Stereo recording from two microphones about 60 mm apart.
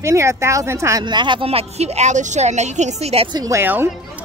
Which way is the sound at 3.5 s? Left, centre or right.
Right.